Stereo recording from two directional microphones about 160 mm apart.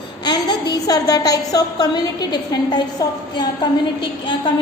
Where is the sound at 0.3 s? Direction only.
25° left (ahead or behind).